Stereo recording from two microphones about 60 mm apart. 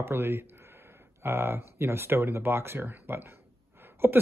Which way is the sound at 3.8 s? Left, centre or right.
Right.